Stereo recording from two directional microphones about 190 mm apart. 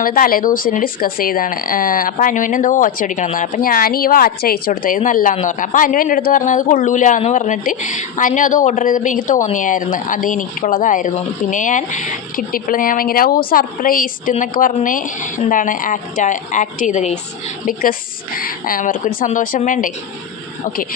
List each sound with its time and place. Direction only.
0.0 s speech: 50° left (ahead or behind)
18.3 s speech: 50° left (ahead or behind)